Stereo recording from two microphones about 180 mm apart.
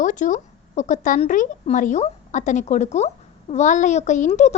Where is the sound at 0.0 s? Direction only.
45° left (ahead or behind).